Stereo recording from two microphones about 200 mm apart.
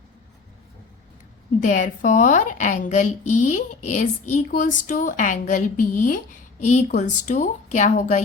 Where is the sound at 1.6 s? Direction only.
40° left (ahead or behind).